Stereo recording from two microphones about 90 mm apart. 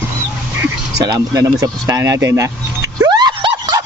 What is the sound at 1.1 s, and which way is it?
Speech, 40° right (ahead or behind).